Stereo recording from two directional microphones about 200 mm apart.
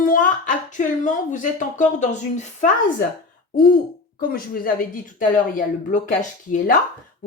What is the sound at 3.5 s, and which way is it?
Hoot, 45° left (ahead or behind).